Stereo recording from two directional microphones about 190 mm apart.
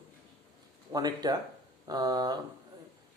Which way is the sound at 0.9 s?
20° right (ahead or behind).